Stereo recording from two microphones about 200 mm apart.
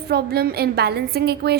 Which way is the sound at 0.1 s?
50° right (ahead or behind).